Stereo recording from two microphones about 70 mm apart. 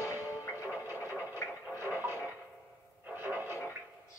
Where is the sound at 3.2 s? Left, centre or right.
Right.